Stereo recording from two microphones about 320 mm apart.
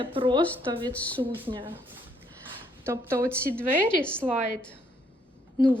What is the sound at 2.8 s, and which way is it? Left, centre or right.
A woman's voice, centre.